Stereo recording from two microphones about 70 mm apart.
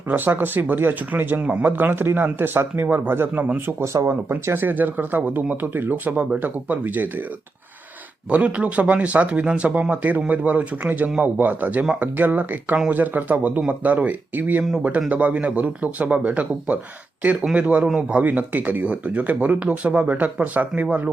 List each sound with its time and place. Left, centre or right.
0.1 s speech: right
3.7 s speech: right
8.3 s speech: centre